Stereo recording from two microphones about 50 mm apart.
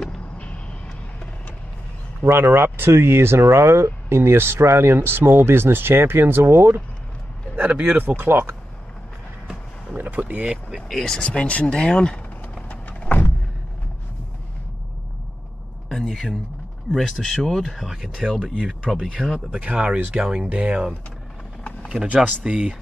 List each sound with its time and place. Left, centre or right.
2.2 s speech: right
7.5 s speech: right
8.2 s speech: right
10.0 s speech: right
10.4 s speech: centre
10.9 s speech: centre
11.1 s speech: left
12.6 s a sound: left
15.9 s speech: centre
19.5 s speech: right
22.0 s speech: right